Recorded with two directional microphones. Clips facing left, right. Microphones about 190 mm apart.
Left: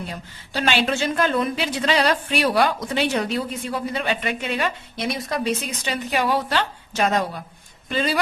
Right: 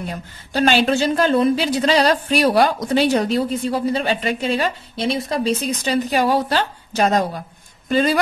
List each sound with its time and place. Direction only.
0.5 s a man's voice: 40° right (ahead or behind)